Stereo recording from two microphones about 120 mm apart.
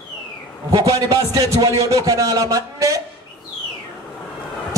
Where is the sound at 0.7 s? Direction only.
30° right (ahead or behind).